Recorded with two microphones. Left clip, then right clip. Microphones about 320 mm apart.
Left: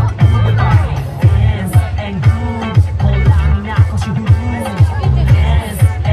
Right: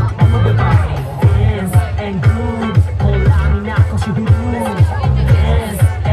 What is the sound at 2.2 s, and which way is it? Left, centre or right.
Music, centre.